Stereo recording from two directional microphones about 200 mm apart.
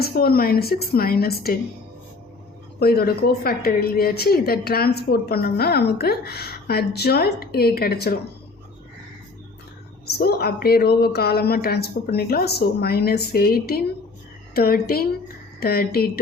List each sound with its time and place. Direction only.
0.0 s a woman's voice: 50° left (ahead or behind)
2.7 s a woman's voice: 50° left (ahead or behind)
10.1 s a woman's voice: 50° left (ahead or behind)